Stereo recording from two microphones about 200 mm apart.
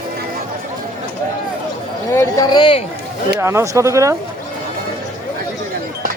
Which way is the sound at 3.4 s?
10° right (ahead or behind).